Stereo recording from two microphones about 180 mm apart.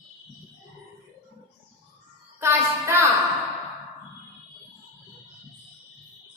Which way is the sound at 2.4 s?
15° right (ahead or behind).